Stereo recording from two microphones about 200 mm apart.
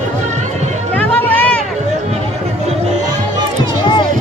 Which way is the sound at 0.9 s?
10° left (ahead or behind).